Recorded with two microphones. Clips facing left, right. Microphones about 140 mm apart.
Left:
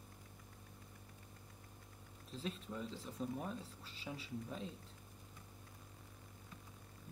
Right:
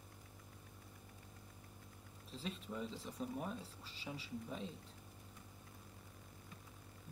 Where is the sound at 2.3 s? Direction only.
Centre (ahead or behind).